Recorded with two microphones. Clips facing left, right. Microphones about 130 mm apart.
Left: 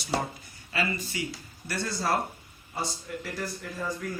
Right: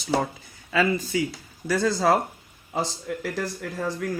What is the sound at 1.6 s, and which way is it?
Speech, 90° right.